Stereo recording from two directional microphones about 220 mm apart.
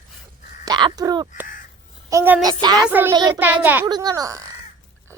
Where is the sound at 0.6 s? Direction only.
20° right (ahead or behind).